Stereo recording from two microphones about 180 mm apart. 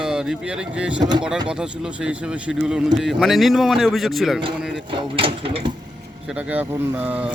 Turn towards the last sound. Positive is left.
turn(degrees=-10)  # may be behind; listen again after turning